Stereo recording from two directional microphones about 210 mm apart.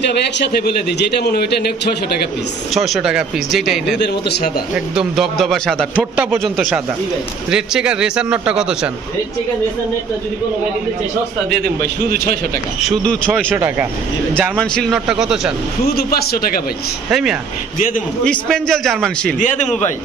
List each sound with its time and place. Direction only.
0.4 s a man's voice: 50° left (ahead or behind)
2.7 s a man's voice: centre (ahead or behind)
4.0 s a man's voice: 50° left (ahead or behind)
4.7 s a man's voice: centre (ahead or behind)
11.8 s a man's voice: 45° right (ahead or behind)
13.0 s a man's voice: 5° left (ahead or behind)
13.5 s a man's voice: 10° right (ahead or behind)
15.9 s a man's voice: 45° left (ahead or behind)
17.1 s a man's voice: centre (ahead or behind)
17.7 s a man's voice: 40° left (ahead or behind)
18.2 s a man's voice: 5° left (ahead or behind)
19.4 s a man's voice: 35° left (ahead or behind)